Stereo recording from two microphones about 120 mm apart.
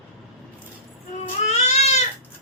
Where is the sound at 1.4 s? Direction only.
70° left (ahead or behind).